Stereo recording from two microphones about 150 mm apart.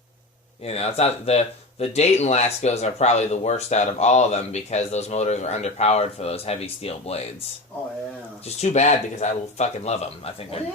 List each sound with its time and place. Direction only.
0.6 s speech: 40° left (ahead or behind)
8.4 s speech: 45° left (ahead or behind)